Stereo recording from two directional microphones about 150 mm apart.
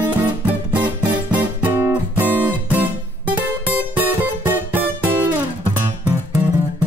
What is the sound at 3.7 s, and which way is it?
Music, 10° right (ahead or behind).